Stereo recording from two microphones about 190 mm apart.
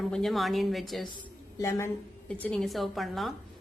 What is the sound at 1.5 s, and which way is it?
A woman's voice, 15° left (ahead or behind).